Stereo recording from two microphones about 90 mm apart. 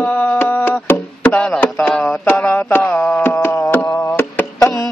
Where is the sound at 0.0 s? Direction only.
20° left (ahead or behind).